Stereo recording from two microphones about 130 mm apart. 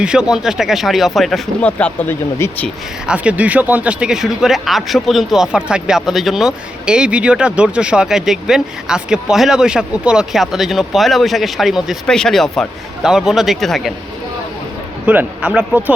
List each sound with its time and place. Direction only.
0.0 s speech: 5° right (ahead or behind); by 2.1 s 10° left (ahead or behind)
2.4 s speech: 20° left (ahead or behind)
3.1 s speech: 10° right (ahead or behind)
15.0 s speech: 10° right (ahead or behind)